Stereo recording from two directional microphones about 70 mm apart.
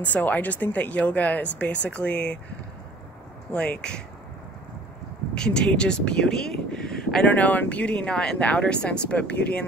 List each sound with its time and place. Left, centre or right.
0.0 s speech: left
3.5 s speech: centre
5.3 s speech: centre
7.2 s speech: left